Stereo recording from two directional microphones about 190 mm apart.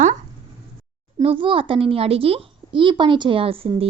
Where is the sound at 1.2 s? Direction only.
25° right (ahead or behind).